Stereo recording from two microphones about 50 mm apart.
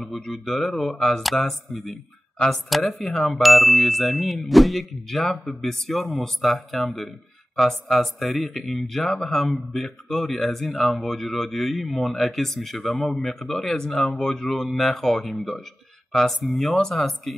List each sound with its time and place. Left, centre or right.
0.5 s speech: centre
2.3 s speech: centre
2.7 s speech: centre